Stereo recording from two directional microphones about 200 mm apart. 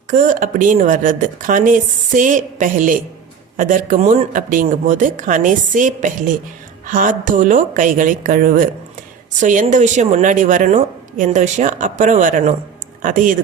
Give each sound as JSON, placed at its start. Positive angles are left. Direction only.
{"t": 0.1, "sound": "a woman's voice", "side_deg": -40}